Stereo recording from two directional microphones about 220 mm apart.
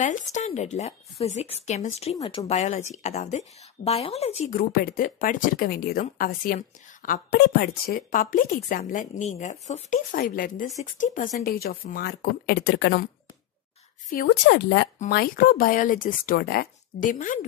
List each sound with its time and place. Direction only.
0.0 s speech: 35° left (ahead or behind)
4.6 s speech: 40° left (ahead or behind)
14.1 s speech: 50° left (ahead or behind)
15.0 s speech: 40° left (ahead or behind)